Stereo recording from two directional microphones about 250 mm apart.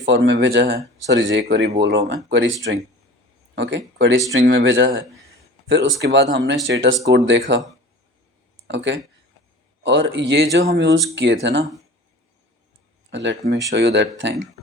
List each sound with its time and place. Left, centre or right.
0.3 s speech: right
3.5 s speech: right
8.6 s speech: right
13.1 s speech: right